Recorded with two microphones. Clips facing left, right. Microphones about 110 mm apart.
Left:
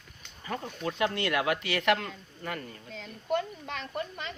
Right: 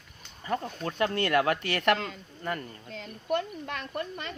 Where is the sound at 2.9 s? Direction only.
60° right (ahead or behind).